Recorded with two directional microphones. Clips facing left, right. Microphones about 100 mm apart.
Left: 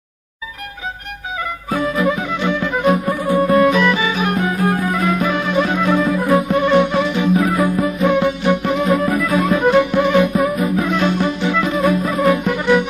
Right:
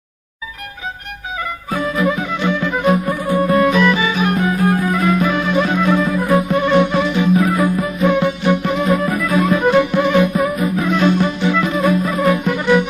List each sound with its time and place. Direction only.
1.7 s music: 30° left (ahead or behind)
10.3 s music: 35° left (ahead or behind)
11.1 s music: 20° left (ahead or behind)